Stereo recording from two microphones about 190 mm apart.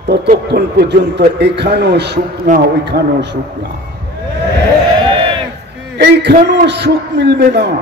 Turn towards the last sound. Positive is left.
turn(degrees=-60)  # may be behind; listen again after turning